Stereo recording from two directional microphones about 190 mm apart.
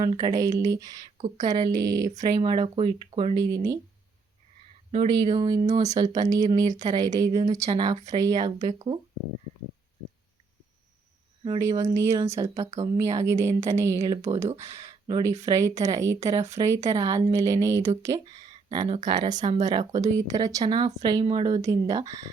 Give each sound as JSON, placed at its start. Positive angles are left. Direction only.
{"t": 0.0, "sound": "speech", "side_deg": -20}
{"t": 4.9, "sound": "speech", "side_deg": -25}
{"t": 7.6, "sound": "speech", "side_deg": -35}
{"t": 8.1, "sound": "speech", "side_deg": -20}
{"t": 11.4, "sound": "speech", "side_deg": -20}
{"t": 19.4, "sound": "speech", "side_deg": -40}
{"t": 19.6, "sound": "speech", "side_deg": -20}